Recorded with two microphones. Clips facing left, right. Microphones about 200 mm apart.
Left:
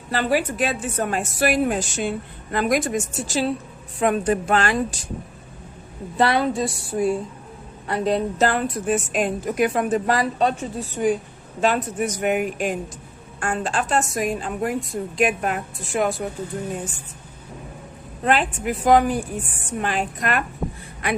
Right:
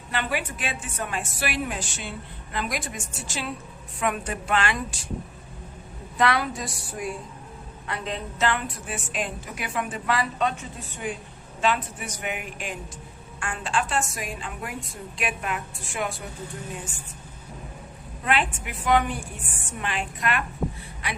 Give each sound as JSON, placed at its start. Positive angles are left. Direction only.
{"t": 0.1, "sound": "a woman's voice", "side_deg": 35}
{"t": 6.1, "sound": "a woman's voice", "side_deg": 30}
{"t": 18.2, "sound": "a woman's voice", "side_deg": 40}